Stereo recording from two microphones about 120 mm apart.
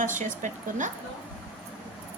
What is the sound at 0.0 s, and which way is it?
Speech, 90° right.